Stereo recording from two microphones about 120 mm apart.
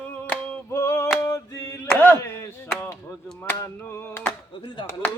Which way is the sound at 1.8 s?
15° left (ahead or behind).